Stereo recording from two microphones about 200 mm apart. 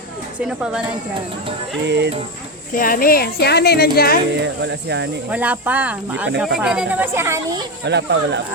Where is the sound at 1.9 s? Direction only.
60° right (ahead or behind).